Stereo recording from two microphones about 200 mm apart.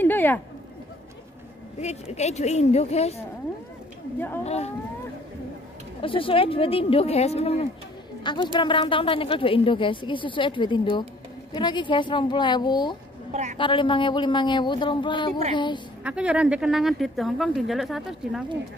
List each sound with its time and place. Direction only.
0.0 s a sound: 10° left (ahead or behind)
1.8 s a woman's voice: 35° left (ahead or behind)
4.5 s a woman's voice: 30° left (ahead or behind)
5.9 s a woman's voice: 25° left (ahead or behind)
13.3 s a woman's voice: 35° right (ahead or behind)
13.6 s a woman's voice: 25° left (ahead or behind)
16.0 s speech: 5° right (ahead or behind)